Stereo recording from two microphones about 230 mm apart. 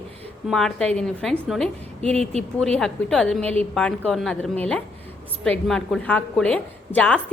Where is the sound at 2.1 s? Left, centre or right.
Right.